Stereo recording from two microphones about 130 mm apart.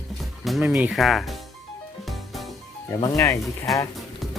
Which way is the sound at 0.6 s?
10° right (ahead or behind).